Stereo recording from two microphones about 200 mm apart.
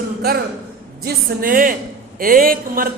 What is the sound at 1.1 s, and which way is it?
Speech, 45° right (ahead or behind).